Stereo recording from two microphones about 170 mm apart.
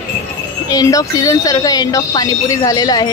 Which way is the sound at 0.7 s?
20° left (ahead or behind).